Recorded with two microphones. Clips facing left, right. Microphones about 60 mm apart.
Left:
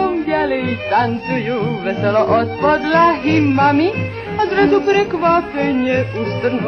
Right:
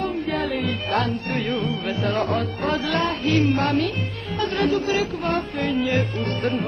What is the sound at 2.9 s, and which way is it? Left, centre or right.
Music, left.